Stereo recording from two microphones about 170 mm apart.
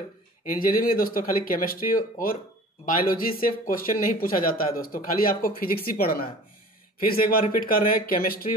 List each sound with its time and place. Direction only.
0.6 s speech: 55° left (ahead or behind)